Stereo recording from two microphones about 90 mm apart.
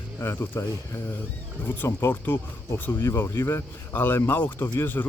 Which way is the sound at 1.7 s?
25° left (ahead or behind).